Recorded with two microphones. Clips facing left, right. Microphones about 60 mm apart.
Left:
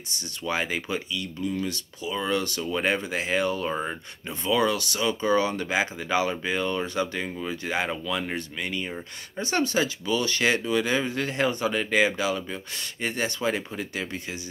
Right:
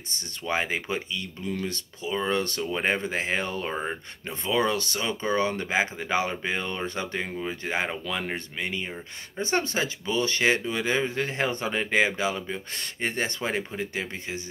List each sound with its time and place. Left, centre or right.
0.1 s speech: right